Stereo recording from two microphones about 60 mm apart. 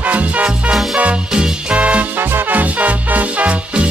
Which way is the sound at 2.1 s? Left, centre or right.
Right.